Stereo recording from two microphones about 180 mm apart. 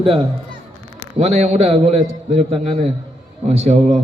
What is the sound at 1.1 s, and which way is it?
A man's voice, 40° right (ahead or behind).